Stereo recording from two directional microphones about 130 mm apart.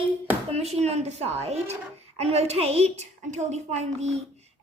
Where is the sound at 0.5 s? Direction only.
55° right (ahead or behind).